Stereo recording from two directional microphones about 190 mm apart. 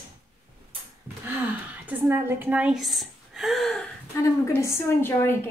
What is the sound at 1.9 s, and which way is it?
A woman's voice, 10° right (ahead or behind).